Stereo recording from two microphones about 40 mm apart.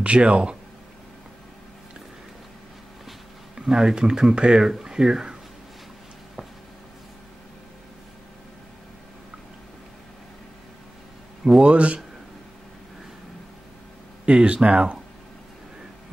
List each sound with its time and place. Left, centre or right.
0.0 s speech: right
3.5 s speech: centre
11.6 s speech: right
14.2 s speech: right